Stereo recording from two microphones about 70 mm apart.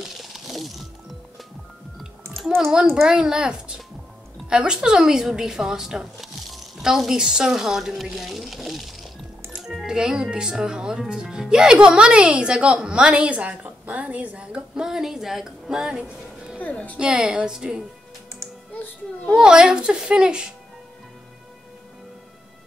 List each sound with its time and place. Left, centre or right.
0.2 s music: centre
2.9 s speech: centre
16.5 s speech: left
16.9 s speech: centre
18.7 s a child's voice: left
19.3 s speech: centre